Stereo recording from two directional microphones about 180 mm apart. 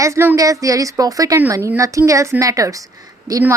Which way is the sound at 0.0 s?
15° right (ahead or behind).